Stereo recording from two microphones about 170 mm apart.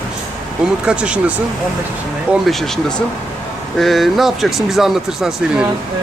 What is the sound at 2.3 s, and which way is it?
Speech, centre (ahead or behind).